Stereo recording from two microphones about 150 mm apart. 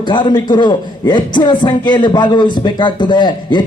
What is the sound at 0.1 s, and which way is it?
A man's voice, 30° left (ahead or behind).